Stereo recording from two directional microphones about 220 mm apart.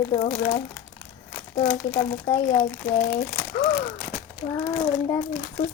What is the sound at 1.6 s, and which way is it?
Child singing, 5° left (ahead or behind).